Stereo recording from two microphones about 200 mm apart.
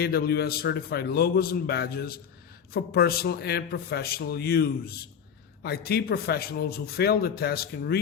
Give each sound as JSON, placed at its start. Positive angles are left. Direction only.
{"t": 0.0, "sound": "a man's voice", "side_deg": 50}